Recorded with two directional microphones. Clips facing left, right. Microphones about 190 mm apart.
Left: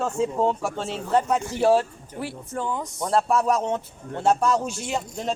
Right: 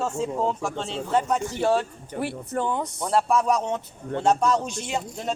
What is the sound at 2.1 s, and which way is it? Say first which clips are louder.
Speech: right 3 dB; 60° right (ahead or behind).